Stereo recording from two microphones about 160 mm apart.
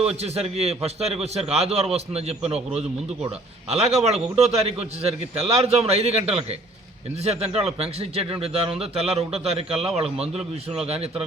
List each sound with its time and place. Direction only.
0.0 s a man's voice: 40° right (ahead or behind)